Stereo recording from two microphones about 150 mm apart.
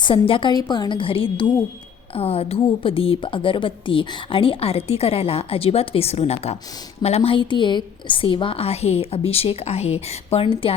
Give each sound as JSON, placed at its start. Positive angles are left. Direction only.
{"t": 0.0, "sound": "a woman's voice", "side_deg": 35}